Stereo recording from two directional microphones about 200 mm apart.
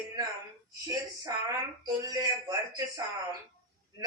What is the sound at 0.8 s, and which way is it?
A man's voice, 20° right (ahead or behind).